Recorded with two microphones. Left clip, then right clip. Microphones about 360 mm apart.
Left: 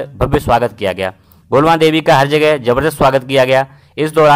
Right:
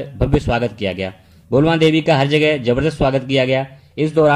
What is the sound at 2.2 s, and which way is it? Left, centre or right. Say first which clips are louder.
Speech: left 4 dB; centre.